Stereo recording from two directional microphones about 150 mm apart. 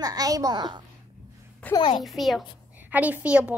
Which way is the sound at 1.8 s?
35° left (ahead or behind).